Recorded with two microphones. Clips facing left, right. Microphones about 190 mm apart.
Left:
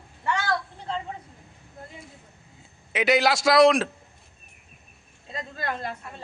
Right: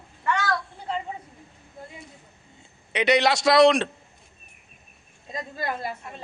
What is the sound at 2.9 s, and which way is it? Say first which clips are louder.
Speech: right 1 dB; centre (ahead or behind).